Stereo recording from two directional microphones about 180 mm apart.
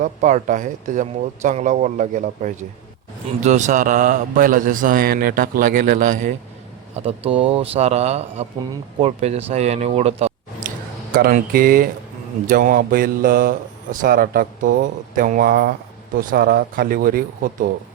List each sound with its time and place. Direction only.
0.0 s speech: 45° right (ahead or behind)
6.9 s a man's voice: 35° right (ahead or behind)
11.1 s speech: 50° right (ahead or behind)